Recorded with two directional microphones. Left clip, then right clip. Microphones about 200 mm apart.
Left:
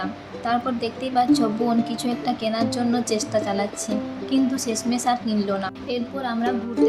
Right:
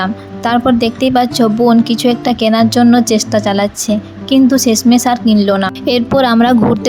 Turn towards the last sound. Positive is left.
turn(degrees=-55)  # may be behind; listen again after turning